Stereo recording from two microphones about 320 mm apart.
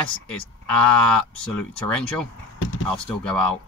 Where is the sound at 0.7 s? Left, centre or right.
Centre.